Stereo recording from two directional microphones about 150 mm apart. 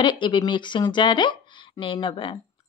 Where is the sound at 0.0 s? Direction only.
30° left (ahead or behind).